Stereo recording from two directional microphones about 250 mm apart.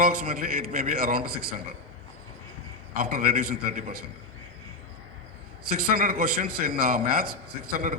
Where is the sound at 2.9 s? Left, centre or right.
Right.